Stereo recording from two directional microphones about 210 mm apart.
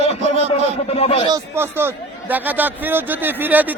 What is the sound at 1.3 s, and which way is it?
A man's voice, 10° right (ahead or behind).